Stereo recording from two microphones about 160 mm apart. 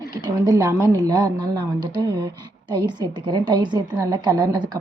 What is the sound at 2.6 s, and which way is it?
A woman's voice, 30° right (ahead or behind).